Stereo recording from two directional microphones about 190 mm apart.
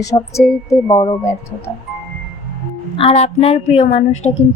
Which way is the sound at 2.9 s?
30° left (ahead or behind).